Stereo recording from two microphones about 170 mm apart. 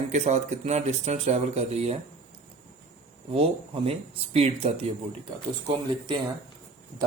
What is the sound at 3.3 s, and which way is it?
Speech, 35° right (ahead or behind).